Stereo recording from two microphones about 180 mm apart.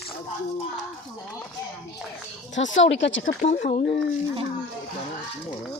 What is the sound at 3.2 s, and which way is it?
Speech, 45° left (ahead or behind).